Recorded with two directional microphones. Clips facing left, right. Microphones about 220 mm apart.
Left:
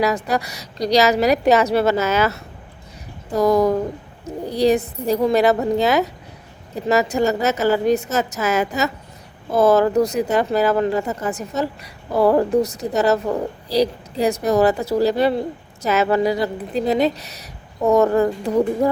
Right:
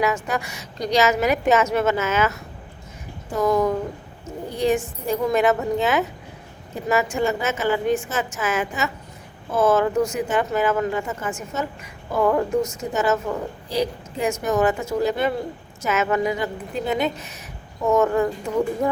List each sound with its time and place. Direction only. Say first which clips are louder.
0.0 s speech: left 3 dB; 35° left (ahead or behind)
3.3 s speech: left 4 dB; 35° left (ahead or behind)